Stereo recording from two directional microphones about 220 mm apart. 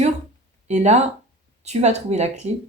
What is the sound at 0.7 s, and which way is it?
Speech, 30° right (ahead or behind).